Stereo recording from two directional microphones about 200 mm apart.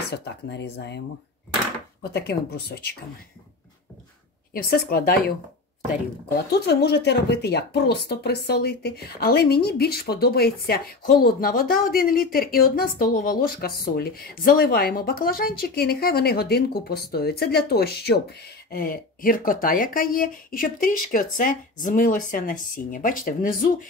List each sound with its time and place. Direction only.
0.1 s speech: 60° left (ahead or behind)
2.1 s speech: 55° left (ahead or behind)
4.6 s speech: 50° left (ahead or behind)
6.5 s speech: 55° left (ahead or behind)